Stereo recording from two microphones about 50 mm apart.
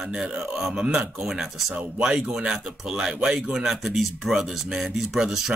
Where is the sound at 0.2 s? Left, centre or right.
Centre.